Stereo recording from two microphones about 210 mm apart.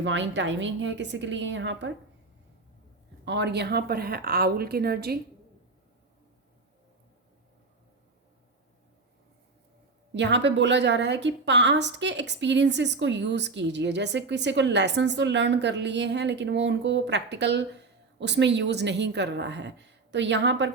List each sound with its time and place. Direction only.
0.0 s a woman's voice: 60° right (ahead or behind)
3.2 s a woman's voice: 55° right (ahead or behind)
10.2 s a woman's voice: 55° right (ahead or behind)